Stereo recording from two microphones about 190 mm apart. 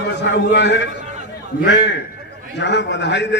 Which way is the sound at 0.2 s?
65° left (ahead or behind).